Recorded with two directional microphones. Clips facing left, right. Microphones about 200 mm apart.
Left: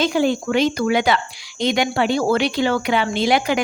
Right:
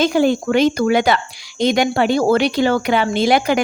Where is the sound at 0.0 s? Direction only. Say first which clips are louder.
Right 3 dB; 45° right (ahead or behind).